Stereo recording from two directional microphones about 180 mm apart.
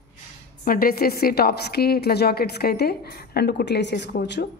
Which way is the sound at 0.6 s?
55° left (ahead or behind).